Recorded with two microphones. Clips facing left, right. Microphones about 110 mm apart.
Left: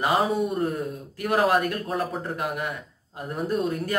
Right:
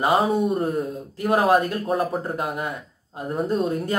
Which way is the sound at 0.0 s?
30° right (ahead or behind).